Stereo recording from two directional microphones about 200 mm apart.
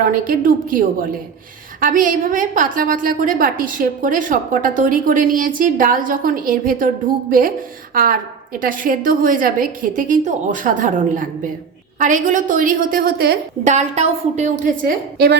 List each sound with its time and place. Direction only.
0.0 s a woman's voice: 45° right (ahead or behind)
13.7 s a woman's voice: 35° right (ahead or behind); by 15.4 s 50° right (ahead or behind)